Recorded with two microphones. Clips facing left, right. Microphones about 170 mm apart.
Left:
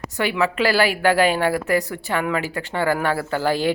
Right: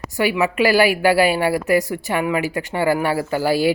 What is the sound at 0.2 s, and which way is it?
Speech, 10° right (ahead or behind).